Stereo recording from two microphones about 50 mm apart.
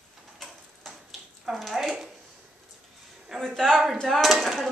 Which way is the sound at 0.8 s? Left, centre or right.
Centre.